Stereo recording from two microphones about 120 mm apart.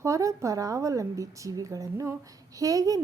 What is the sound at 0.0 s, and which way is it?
A woman's voice, 25° right (ahead or behind).